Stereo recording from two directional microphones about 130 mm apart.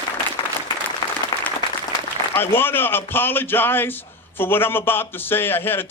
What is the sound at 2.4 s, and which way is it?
A man's voice, 15° left (ahead or behind).